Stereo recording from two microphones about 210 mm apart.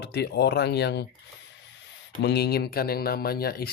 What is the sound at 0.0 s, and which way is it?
Speech, 50° left (ahead or behind).